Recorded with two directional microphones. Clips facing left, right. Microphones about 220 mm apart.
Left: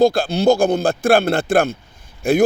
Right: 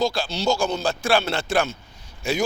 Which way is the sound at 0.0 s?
55° left (ahead or behind).